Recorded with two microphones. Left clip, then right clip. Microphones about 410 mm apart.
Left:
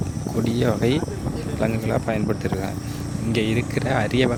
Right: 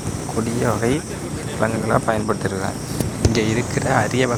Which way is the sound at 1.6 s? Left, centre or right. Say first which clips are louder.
Right 5 dB; left.